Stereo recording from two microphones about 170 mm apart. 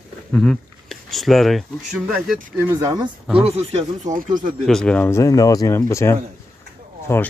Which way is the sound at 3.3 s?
35° right (ahead or behind).